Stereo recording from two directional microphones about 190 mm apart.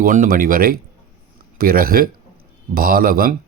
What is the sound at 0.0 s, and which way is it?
Speech, 45° right (ahead or behind).